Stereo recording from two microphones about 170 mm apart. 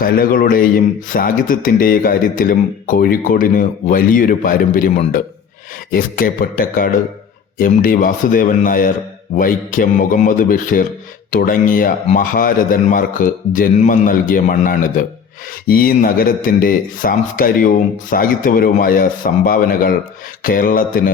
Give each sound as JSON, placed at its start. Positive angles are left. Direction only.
{"t": 0.0, "sound": "a man's voice", "side_deg": 60}
{"t": 5.9, "sound": "a man's voice", "side_deg": 55}